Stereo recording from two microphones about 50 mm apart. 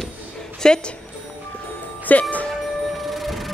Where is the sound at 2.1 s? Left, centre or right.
Left.